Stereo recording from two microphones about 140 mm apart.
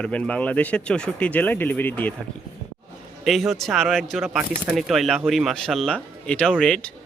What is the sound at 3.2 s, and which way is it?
Speech, centre (ahead or behind).